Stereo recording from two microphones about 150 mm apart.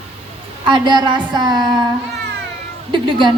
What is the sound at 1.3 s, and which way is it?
Child singing, 30° right (ahead or behind).